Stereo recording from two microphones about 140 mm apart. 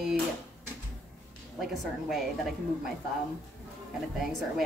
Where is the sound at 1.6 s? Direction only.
Centre (ahead or behind).